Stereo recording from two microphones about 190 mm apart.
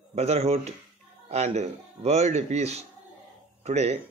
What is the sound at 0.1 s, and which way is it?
A man's voice, 35° right (ahead or behind).